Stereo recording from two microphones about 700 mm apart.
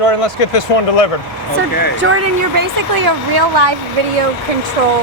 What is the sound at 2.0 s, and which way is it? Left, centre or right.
Speech, centre.